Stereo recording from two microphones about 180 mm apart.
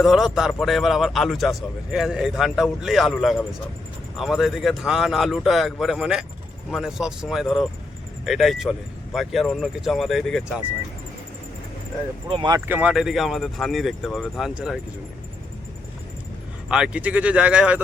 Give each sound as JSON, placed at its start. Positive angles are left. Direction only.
{"t": 0.0, "sound": "a man's voice", "side_deg": 0}
{"t": 12.3, "sound": "speech", "side_deg": -30}
{"t": 12.5, "sound": "a man's voice", "side_deg": -10}
{"t": 16.6, "sound": "speech", "side_deg": -5}